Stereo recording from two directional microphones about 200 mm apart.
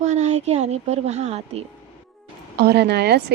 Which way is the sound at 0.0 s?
35° right (ahead or behind).